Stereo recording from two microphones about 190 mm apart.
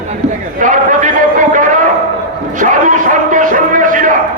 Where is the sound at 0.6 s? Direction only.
45° right (ahead or behind).